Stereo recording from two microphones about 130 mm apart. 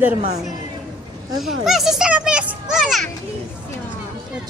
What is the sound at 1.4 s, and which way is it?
A child's voice, centre (ahead or behind).